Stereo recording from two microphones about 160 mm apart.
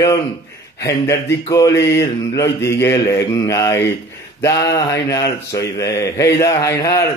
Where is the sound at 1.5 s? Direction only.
20° left (ahead or behind).